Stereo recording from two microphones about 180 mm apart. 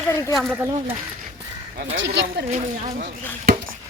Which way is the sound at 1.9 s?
80° right.